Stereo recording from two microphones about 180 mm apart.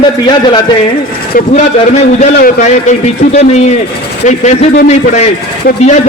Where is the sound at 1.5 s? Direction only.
40° left (ahead or behind).